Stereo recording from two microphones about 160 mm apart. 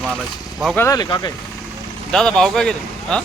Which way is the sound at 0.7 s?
15° left (ahead or behind).